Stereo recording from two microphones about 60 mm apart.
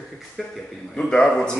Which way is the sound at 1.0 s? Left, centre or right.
Centre.